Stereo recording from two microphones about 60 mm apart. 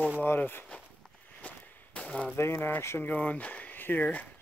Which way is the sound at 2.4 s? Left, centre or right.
Left.